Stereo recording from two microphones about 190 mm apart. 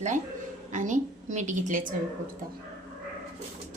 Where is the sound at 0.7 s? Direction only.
40° right (ahead or behind).